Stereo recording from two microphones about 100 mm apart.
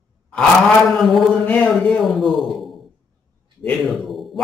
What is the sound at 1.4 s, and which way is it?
Speech, 15° left (ahead or behind).